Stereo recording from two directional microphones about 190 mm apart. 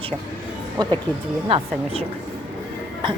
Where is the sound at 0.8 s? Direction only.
20° right (ahead or behind).